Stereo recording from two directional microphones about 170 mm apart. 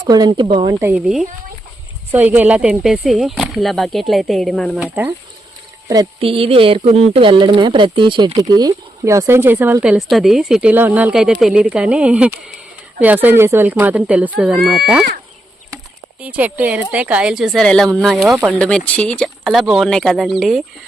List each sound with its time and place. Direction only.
0.0 s speech: 25° right (ahead or behind)
0.7 s speech: 15° right (ahead or behind); by 4.8 s 5° left (ahead or behind)
4.8 s speech: 10° right (ahead or behind)
6.1 s speech: 35° right (ahead or behind); by 14.8 s 5° right (ahead or behind)
16.2 s speech: 10° right (ahead or behind)